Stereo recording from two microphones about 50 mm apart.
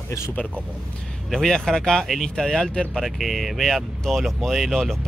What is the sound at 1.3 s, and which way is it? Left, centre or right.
Speech, centre.